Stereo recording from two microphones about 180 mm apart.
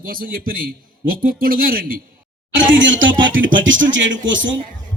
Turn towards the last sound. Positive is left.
turn(degrees=-90)